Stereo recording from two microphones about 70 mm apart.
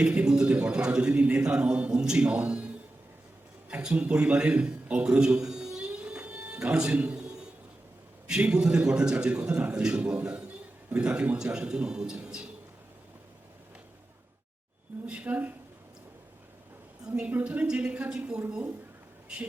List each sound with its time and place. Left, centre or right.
0.0 s a man's voice: centre
3.7 s a sound: centre
8.3 s a man's voice: centre
15.0 s a woman's voice: centre
17.2 s a man's voice: centre